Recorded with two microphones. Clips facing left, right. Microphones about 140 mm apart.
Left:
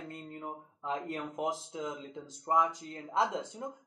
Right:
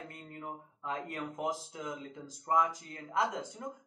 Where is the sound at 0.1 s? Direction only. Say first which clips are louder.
Left 2 dB; 20° left (ahead or behind).